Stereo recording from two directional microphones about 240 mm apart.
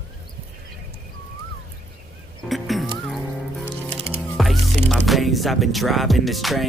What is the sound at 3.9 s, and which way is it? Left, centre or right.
Music, right.